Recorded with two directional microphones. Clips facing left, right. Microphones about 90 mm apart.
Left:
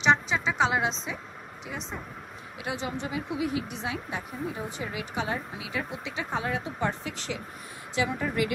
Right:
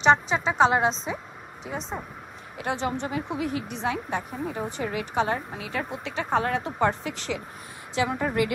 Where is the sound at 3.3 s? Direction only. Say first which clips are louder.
Right 1 dB; 5° left (ahead or behind).